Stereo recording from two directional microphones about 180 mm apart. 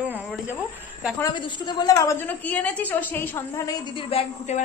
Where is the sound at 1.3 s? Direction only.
25° left (ahead or behind).